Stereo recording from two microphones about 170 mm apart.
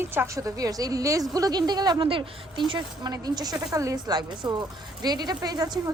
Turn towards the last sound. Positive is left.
turn(degrees=-25)  # may be behind; listen again after turning